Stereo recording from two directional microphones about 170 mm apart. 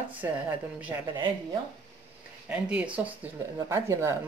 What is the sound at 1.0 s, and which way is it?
Speech, 25° right (ahead or behind).